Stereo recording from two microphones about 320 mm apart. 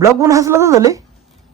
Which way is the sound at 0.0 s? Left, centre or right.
Centre.